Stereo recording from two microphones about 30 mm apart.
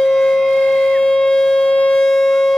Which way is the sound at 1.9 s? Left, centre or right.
Centre.